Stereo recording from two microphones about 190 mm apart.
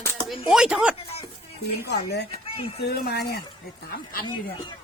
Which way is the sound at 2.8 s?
60° left (ahead or behind).